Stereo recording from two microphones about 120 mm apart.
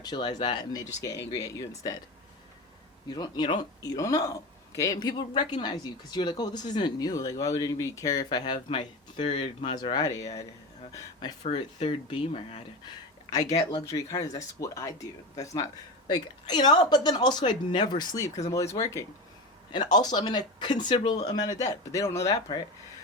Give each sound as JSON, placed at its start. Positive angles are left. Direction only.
{"t": 0.0, "sound": "speech", "side_deg": 35}
{"t": 3.1, "sound": "speech", "side_deg": 35}
{"t": 9.7, "sound": "speech", "side_deg": 35}
{"t": 11.4, "sound": "speech", "side_deg": 60}
{"t": 13.8, "sound": "speech", "side_deg": 25}
{"t": 19.7, "sound": "speech", "side_deg": 35}